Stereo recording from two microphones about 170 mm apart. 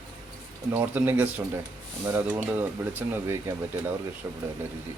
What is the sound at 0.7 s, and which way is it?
Speech, 10° right (ahead or behind).